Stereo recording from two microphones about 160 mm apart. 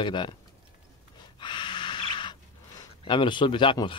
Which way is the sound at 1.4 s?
30° left (ahead or behind).